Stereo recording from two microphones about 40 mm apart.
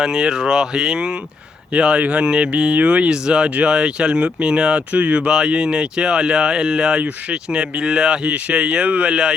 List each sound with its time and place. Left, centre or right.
0.0 s speech: centre; by 3.1 s right
3.1 s speech: centre
4.9 s speech: right
5.2 s speech: centre